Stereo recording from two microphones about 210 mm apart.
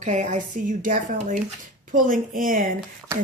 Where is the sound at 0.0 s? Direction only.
35° right (ahead or behind).